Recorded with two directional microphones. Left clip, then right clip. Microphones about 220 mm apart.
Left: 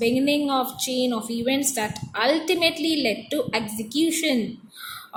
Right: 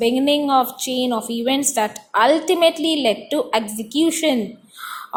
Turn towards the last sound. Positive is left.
turn(degrees=-15)  # may be behind; listen again after turning